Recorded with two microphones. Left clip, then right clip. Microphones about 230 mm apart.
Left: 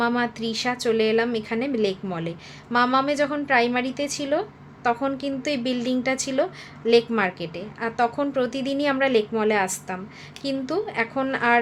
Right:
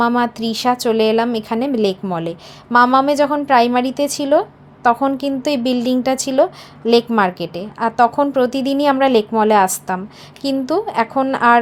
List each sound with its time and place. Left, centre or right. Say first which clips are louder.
0.0 s a woman's voice: right 7 dB; right